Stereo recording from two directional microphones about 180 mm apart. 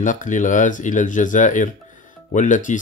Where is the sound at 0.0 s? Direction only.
45° left (ahead or behind).